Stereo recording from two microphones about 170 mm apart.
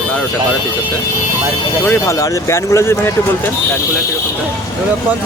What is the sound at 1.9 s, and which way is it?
Speech, 20° left (ahead or behind).